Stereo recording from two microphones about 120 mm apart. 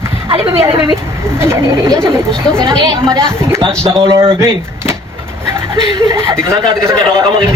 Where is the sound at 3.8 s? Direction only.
50° right (ahead or behind).